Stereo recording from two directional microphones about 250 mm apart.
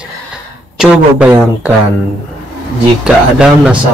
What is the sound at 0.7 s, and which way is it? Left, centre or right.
Speech, centre.